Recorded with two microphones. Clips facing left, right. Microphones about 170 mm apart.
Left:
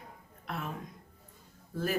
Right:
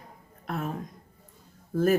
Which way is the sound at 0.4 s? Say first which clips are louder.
Right 6 dB; 45° right (ahead or behind).